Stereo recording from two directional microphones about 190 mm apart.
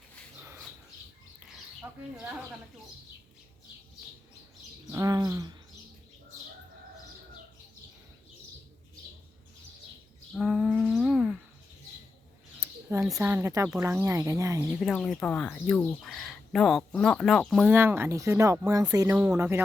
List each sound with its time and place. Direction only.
4.9 s bird: 15° right (ahead or behind)
10.3 s a sound: 5° right (ahead or behind)
12.5 s a sound: 15° right (ahead or behind)
13.1 s speech: 5° right (ahead or behind)
14.8 s speech: centre (ahead or behind)
17.7 s speech: 10° right (ahead or behind)